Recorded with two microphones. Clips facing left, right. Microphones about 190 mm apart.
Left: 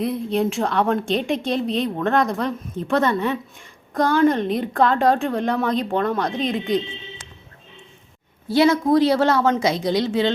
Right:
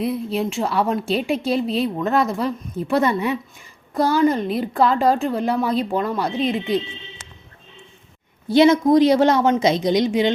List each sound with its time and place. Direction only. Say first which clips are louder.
0.0 s a woman's voice: left 1 dB; centre (ahead or behind)
8.4 s a woman's voice: right 3 dB; 20° right (ahead or behind)